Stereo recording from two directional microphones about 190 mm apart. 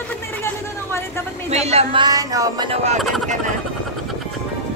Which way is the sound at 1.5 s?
35° right (ahead or behind).